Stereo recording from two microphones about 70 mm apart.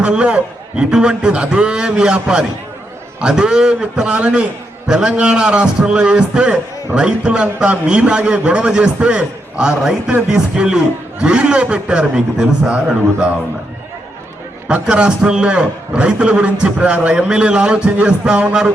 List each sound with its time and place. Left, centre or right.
0.0 s a man's voice: centre
14.7 s a man's voice: centre